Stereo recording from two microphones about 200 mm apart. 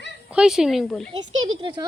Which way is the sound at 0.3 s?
5° right (ahead or behind).